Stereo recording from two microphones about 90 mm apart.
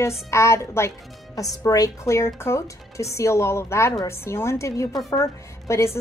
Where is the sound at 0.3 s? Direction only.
30° left (ahead or behind).